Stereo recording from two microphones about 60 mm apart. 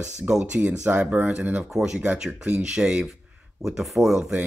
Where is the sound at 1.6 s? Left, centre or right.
Centre.